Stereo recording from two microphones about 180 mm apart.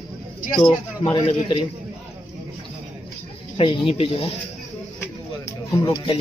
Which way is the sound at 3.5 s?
30° left (ahead or behind).